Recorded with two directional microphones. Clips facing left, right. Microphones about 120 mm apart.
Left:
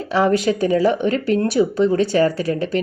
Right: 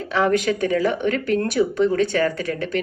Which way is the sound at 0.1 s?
35° left (ahead or behind).